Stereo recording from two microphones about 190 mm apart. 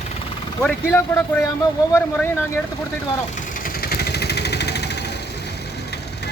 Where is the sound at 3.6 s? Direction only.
55° left (ahead or behind).